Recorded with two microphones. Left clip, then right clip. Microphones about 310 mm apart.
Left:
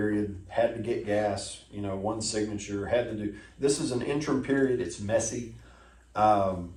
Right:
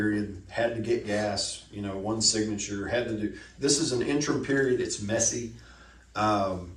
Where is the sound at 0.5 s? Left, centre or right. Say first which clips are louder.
Even; left.